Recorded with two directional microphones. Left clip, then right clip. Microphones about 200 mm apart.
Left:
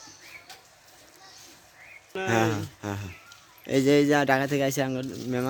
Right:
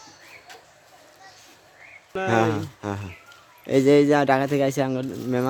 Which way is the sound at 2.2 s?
5° right (ahead or behind).